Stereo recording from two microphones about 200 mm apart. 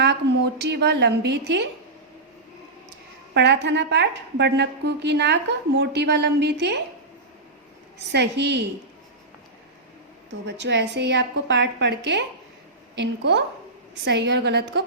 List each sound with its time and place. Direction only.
0.6 s a woman's voice: 55° right (ahead or behind)
3.3 s a woman's voice: 60° right (ahead or behind)
7.9 s a woman's voice: 60° right (ahead or behind)
10.4 s a woman's voice: 60° right (ahead or behind)